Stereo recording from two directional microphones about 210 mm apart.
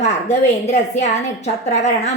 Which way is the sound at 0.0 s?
35° left (ahead or behind).